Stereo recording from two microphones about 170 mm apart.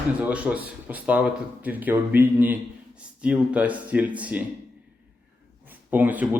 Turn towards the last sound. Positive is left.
turn(degrees=-10)  # may be behind; listen again after turning